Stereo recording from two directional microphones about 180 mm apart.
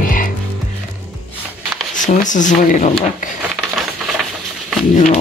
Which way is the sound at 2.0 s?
45° left (ahead or behind).